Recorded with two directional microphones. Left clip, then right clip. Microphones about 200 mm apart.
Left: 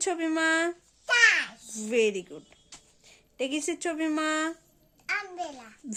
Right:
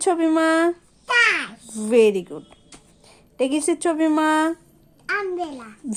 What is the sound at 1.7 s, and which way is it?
Speech, 10° right (ahead or behind).